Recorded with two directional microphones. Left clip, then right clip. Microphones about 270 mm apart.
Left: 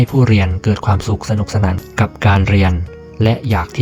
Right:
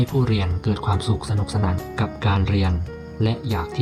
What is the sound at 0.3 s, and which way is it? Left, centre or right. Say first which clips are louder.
Speech: left 8 dB; left.